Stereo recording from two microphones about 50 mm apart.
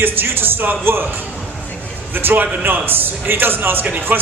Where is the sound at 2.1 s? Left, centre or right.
Right.